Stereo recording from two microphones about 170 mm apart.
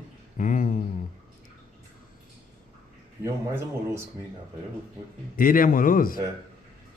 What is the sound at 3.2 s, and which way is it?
Speech, 15° right (ahead or behind).